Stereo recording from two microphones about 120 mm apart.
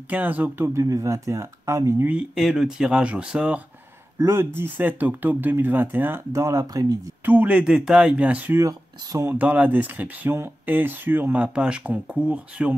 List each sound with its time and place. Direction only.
0.1 s speech: 15° right (ahead or behind)
0.8 s speech: 25° right (ahead or behind)
2.0 s speech: 5° right (ahead or behind)
4.2 s speech: 20° right (ahead or behind)
7.2 s speech: 15° right (ahead or behind)
8.5 s speech: 25° right (ahead or behind)
9.3 s speech: 15° right (ahead or behind)